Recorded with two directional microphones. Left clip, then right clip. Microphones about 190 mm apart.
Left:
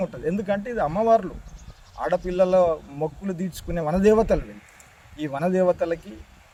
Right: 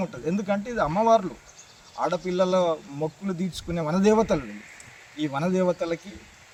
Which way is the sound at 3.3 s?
30° left (ahead or behind).